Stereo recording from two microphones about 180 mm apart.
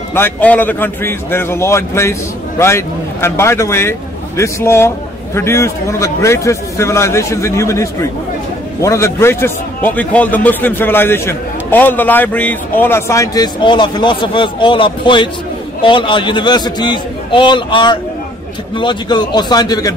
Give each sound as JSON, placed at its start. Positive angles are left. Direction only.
{"t": 0.1, "sound": "a man's voice", "side_deg": 10}